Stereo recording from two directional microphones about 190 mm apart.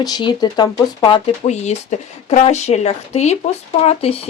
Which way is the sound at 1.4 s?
35° left (ahead or behind).